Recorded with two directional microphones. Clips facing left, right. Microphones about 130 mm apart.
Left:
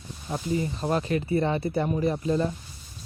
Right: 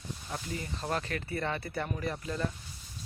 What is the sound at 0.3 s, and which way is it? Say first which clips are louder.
Speech: left 11 dB; 20° left (ahead or behind).